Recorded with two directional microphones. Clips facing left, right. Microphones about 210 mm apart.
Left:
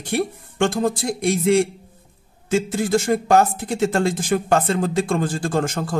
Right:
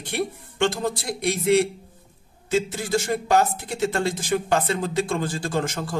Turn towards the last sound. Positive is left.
turn(degrees=50)  # may be behind; listen again after turning